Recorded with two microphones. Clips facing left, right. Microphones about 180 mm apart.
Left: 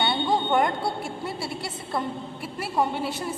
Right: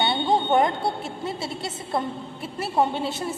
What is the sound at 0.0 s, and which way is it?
A woman's voice, 20° right (ahead or behind).